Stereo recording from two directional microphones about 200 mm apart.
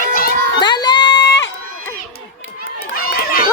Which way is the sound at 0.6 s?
20° left (ahead or behind).